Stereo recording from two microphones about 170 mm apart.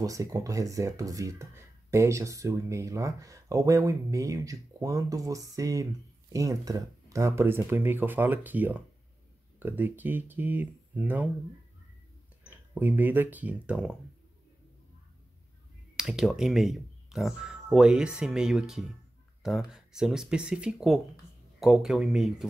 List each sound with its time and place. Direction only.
0.0 s speech: 20° right (ahead or behind)
12.4 s speech: 10° right (ahead or behind)
16.0 s speech: centre (ahead or behind)